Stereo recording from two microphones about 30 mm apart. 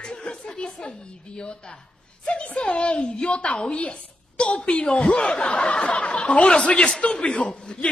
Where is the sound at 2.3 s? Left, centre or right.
Left.